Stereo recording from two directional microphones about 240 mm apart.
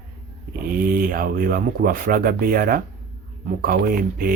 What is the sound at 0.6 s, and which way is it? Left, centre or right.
Speech, right.